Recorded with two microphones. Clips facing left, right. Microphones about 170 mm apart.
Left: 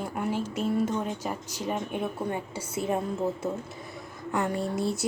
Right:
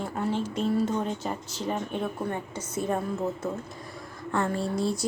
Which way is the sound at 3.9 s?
15° left (ahead or behind).